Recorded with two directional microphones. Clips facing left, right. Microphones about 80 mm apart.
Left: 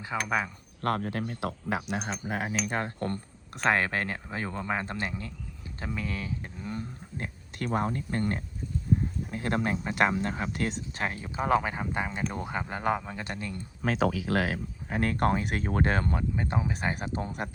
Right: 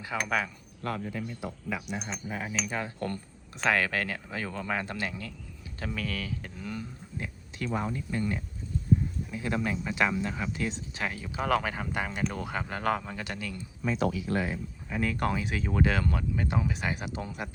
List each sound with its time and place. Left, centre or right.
0.0 s speech: left
0.8 s speech: left
2.0 s speech: left
7.2 s speech: left
10.5 s speech: left
11.0 s speech: left
11.3 s speech: left
13.1 s speech: left
13.8 s speech: left
14.8 s speech: left